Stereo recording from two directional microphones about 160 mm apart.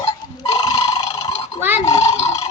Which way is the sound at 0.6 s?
30° left (ahead or behind).